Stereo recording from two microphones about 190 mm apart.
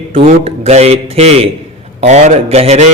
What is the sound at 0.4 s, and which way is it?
A man's voice, 35° right (ahead or behind).